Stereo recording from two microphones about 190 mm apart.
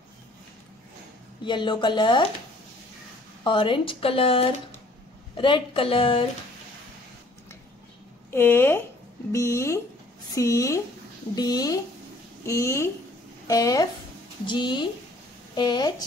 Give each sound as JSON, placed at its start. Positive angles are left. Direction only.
{"t": 1.4, "sound": "speech", "side_deg": 25}
{"t": 3.4, "sound": "speech", "side_deg": 25}
{"t": 8.3, "sound": "speech", "side_deg": 10}